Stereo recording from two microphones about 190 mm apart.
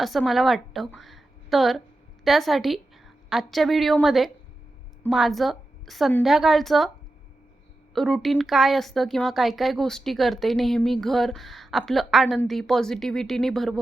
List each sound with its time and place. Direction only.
0.0 s a woman's voice: centre (ahead or behind)
7.9 s speech: centre (ahead or behind)